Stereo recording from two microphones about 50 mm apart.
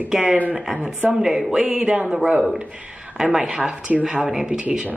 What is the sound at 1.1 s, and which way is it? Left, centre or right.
Speech, centre.